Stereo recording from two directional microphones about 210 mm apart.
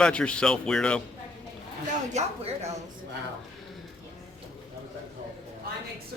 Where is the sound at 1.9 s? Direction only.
30° right (ahead or behind).